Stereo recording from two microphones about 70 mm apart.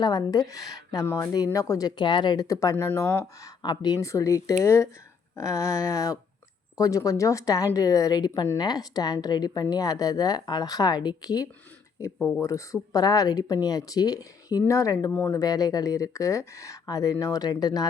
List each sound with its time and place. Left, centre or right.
0.0 s speech: left
2.0 s speech: left
2.5 s speech: left
2.7 s speech: left
3.6 s speech: left
4.0 s a woman's voice: left
12.4 s speech: left
14.7 s speech: left
15.3 s speech: left